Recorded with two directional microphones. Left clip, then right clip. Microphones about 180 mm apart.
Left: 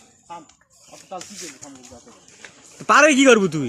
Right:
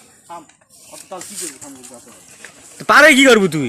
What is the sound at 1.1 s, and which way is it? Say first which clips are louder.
Speech: right 3 dB; 40° right (ahead or behind).